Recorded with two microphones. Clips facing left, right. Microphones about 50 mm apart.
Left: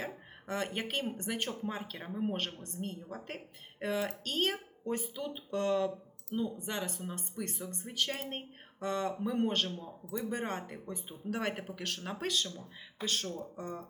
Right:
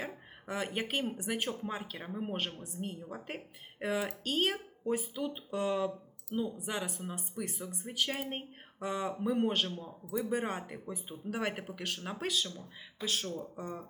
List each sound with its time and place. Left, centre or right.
0.0 s speech: centre